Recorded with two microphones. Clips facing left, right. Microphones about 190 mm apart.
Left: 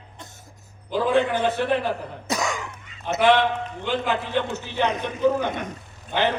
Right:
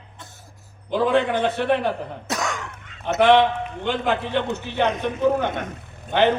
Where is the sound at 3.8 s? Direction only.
60° right (ahead or behind).